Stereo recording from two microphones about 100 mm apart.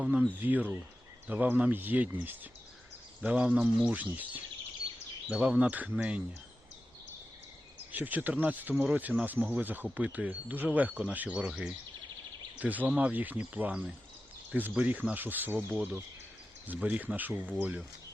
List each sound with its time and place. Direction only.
0.0 s speech: 10° right (ahead or behind)
5.3 s speech: 10° right (ahead or behind)
7.9 s speech: 15° right (ahead or behind)